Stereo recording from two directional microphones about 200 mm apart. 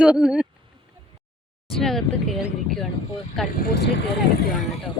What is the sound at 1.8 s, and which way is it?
Speech, centre (ahead or behind).